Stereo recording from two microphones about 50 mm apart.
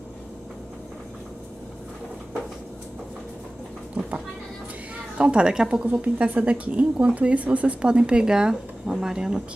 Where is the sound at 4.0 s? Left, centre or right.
Right.